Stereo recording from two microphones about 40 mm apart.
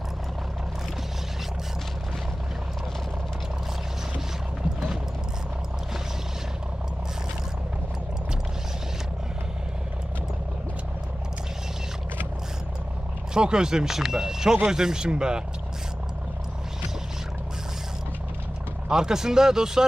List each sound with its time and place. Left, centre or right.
13.3 s speech: centre
18.9 s speech: centre